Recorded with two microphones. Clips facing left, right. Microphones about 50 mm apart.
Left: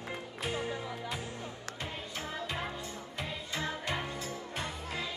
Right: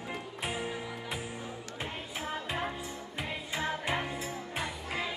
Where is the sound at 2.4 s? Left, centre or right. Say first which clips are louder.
Right 2 dB; centre.